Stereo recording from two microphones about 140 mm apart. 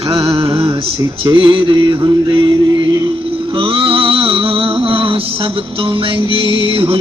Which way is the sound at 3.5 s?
40° right (ahead or behind).